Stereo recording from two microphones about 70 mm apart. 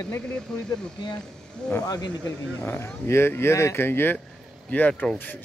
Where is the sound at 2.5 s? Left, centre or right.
Left.